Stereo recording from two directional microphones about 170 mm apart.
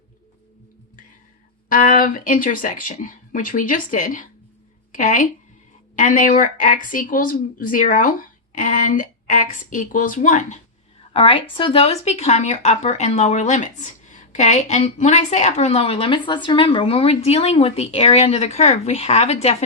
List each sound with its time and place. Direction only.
1.7 s a woman's voice: 50° left (ahead or behind)
11.1 s speech: 35° left (ahead or behind)